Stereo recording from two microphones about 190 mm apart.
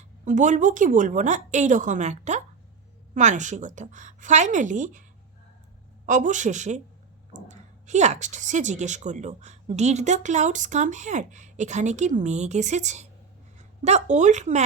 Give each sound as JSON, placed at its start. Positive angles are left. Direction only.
{"t": 0.3, "sound": "speech", "side_deg": -40}
{"t": 6.1, "sound": "a woman's voice", "side_deg": -40}